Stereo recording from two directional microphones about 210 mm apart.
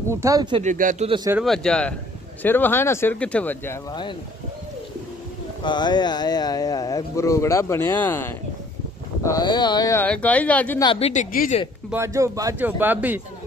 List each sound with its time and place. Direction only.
0.1 s a man's voice: 15° right (ahead or behind)
0.7 s speech: 35° right (ahead or behind)
1.4 s speech: centre (ahead or behind)
5.6 s speech: 20° left (ahead or behind)
10.8 s speech: 25° left (ahead or behind)
11.9 s a man's voice: 15° right (ahead or behind)